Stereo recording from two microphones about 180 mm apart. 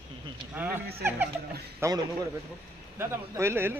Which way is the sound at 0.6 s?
10° right (ahead or behind).